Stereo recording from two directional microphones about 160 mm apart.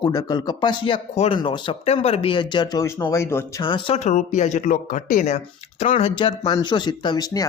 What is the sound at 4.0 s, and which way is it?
Speech, 45° left (ahead or behind).